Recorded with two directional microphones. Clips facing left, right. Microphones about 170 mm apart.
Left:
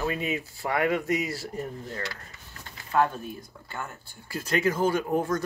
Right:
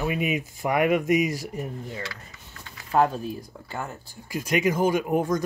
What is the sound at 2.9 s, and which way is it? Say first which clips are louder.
Speech: right 3 dB; 35° right (ahead or behind).